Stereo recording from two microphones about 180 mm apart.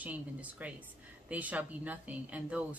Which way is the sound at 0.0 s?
10° right (ahead or behind).